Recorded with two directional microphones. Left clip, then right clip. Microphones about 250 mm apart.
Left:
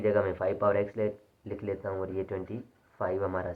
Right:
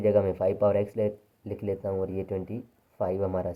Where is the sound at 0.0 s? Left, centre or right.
Centre.